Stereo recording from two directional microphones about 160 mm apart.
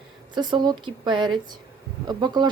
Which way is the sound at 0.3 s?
25° right (ahead or behind).